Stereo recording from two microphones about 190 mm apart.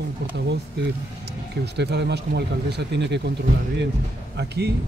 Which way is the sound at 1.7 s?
65° right (ahead or behind).